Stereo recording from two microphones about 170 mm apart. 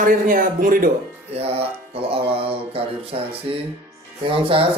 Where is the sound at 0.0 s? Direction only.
55° right (ahead or behind).